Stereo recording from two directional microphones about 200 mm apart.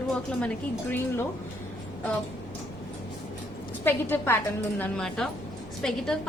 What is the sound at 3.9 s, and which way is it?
A woman's voice, 10° left (ahead or behind).